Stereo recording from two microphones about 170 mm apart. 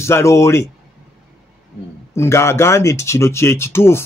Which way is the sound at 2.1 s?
15° left (ahead or behind).